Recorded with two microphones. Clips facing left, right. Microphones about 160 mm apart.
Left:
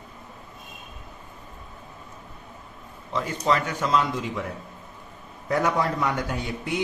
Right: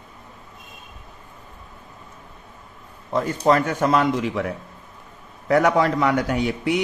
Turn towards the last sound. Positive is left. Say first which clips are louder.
# right 7 dB
turn(degrees=-80)